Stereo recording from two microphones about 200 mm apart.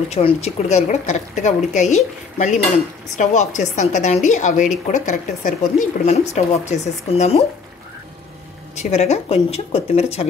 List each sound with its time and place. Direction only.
0.1 s a woman's voice: 30° left (ahead or behind)
8.7 s a woman's voice: 35° left (ahead or behind)